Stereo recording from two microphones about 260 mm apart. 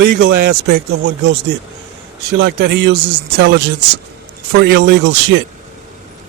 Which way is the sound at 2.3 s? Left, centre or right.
Right.